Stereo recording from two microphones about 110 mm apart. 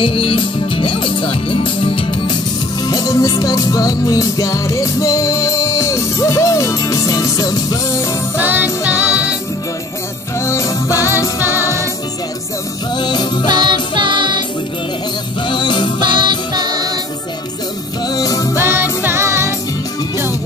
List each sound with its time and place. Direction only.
0.0 s speech: 55° left (ahead or behind); by 8.1 s 30° left (ahead or behind)
8.4 s music: 15° right (ahead or behind)
10.4 s music: 25° left (ahead or behind)
12.9 s music: 40° left (ahead or behind)
13.5 s music: 45° right (ahead or behind)
15.4 s music: 45° left (ahead or behind)
16.0 s music: 45° right (ahead or behind)
18.0 s speech: 35° left (ahead or behind)
18.6 s music: 20° right (ahead or behind)